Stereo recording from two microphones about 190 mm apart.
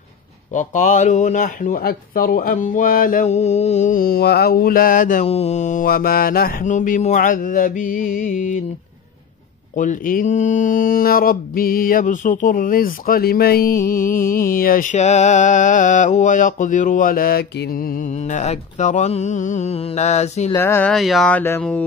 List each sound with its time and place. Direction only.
0.5 s speech: 40° left (ahead or behind)
9.8 s speech: 45° left (ahead or behind)
20.5 s speech: 10° left (ahead or behind)
20.9 s speech: centre (ahead or behind)